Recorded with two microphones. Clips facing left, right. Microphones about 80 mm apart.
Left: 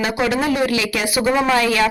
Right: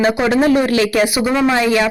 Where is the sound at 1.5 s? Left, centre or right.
Right.